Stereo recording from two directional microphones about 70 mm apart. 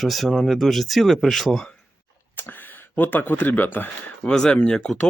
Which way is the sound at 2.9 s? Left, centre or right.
Left.